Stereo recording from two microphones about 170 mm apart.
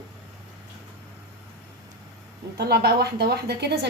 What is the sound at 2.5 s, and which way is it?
A woman's voice, 70° right (ahead or behind).